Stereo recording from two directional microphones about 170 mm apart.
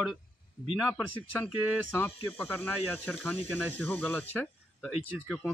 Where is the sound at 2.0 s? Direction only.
10° left (ahead or behind).